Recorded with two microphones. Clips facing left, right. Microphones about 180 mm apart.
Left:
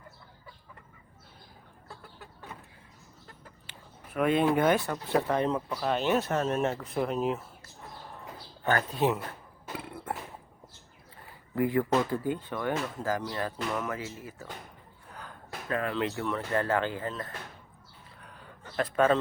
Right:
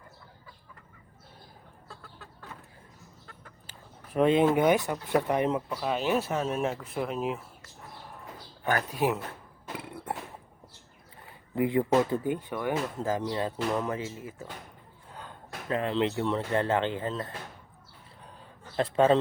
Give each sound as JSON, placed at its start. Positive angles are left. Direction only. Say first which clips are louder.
{"t": 2.1, "sound": "chicken", "louder": "left 1 dB", "side_deg": 15}
{"t": 4.1, "sound": "speech", "louder": "right 3 dB", "side_deg": -25}
{"t": 8.6, "sound": "speech", "louder": "left 1 dB", "side_deg": -10}
{"t": 9.7, "sound": "a sound", "louder": "even", "side_deg": -20}
{"t": 11.5, "sound": "speech", "louder": "right 2 dB", "side_deg": -20}
{"t": 18.8, "sound": "speech", "louder": "right 2 dB", "side_deg": -25}